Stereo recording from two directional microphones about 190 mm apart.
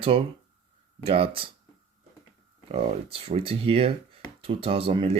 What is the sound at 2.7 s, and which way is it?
Speech, 30° right (ahead or behind).